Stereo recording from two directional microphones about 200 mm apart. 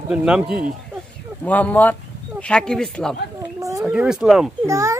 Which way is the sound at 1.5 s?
10° left (ahead or behind).